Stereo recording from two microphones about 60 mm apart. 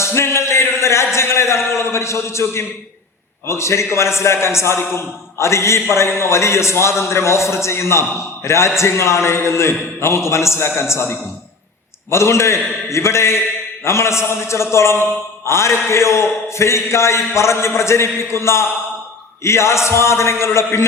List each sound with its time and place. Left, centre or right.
0.0 s a man's voice: left